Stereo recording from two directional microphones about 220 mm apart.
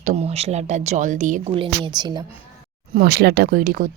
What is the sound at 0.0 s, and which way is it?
Speech, 30° right (ahead or behind).